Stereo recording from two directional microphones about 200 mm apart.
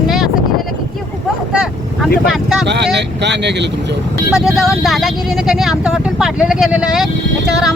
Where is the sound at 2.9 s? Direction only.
60° right (ahead or behind).